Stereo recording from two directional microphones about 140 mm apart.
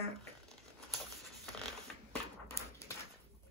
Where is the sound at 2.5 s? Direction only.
20° left (ahead or behind).